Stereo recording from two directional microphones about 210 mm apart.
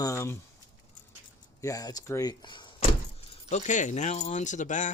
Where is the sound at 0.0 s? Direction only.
15° left (ahead or behind).